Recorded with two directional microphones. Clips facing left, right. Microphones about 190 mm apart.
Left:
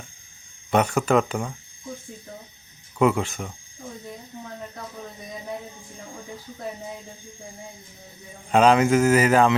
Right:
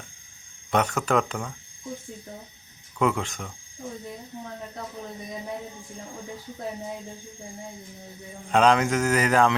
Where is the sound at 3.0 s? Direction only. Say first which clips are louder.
Left 4 dB; 5° left (ahead or behind).